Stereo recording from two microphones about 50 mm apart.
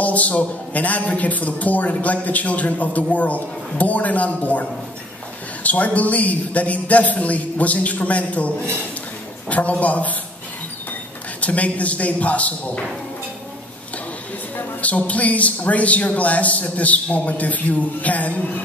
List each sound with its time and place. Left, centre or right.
0.0 s a man's voice: left
11.4 s a man's voice: left
14.6 s a man's voice: left